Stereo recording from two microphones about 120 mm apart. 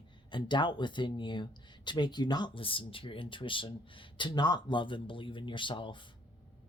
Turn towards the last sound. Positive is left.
turn(degrees=45)  # may be behind; listen again after turning